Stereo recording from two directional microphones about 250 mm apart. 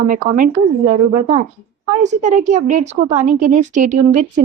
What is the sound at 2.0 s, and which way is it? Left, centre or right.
A woman's voice, right.